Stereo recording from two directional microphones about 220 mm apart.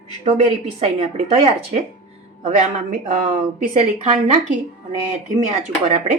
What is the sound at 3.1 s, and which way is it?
Speech, 40° right (ahead or behind).